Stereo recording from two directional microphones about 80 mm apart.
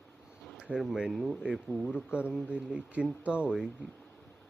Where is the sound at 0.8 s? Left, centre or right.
Centre.